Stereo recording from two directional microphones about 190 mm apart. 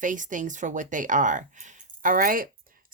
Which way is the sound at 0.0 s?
45° right (ahead or behind).